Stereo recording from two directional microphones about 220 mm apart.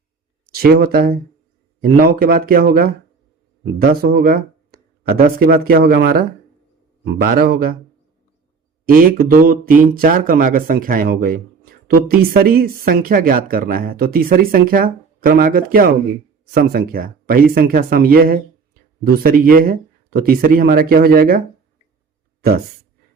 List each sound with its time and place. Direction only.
0.5 s speech: 45° right (ahead or behind)
8.9 s speech: 40° right (ahead or behind)